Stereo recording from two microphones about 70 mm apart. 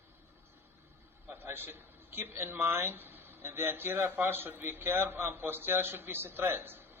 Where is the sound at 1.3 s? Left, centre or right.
Right.